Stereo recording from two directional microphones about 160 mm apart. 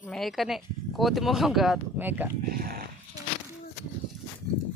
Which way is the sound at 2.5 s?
65° right (ahead or behind).